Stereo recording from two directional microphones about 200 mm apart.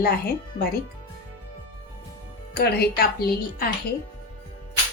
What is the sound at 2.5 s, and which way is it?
Speech, 55° left (ahead or behind).